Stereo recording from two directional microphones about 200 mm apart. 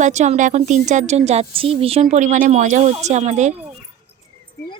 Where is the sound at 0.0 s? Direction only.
35° right (ahead or behind).